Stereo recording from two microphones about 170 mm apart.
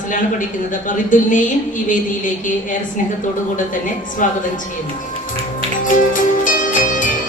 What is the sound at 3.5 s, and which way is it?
Speech, 50° left (ahead or behind).